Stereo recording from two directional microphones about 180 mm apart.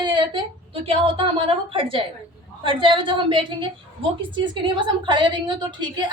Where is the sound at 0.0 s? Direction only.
25° right (ahead or behind).